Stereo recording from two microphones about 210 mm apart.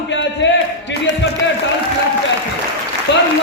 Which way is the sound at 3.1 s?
55° left (ahead or behind).